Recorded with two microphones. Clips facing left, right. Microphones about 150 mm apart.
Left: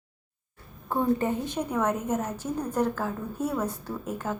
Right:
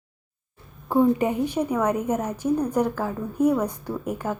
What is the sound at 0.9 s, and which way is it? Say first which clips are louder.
A woman's voice: right 5 dB; 15° right (ahead or behind).